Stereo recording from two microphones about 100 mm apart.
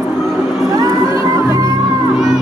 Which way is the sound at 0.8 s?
35° right (ahead or behind).